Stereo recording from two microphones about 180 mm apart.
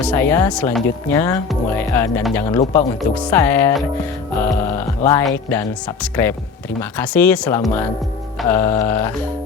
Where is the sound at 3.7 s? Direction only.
10° left (ahead or behind).